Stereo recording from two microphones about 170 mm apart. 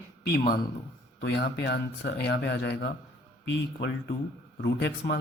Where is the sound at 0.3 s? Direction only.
65° left (ahead or behind).